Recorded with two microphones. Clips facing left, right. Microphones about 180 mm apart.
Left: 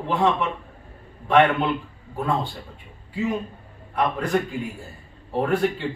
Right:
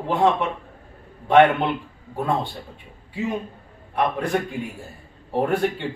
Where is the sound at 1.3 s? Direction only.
20° right (ahead or behind).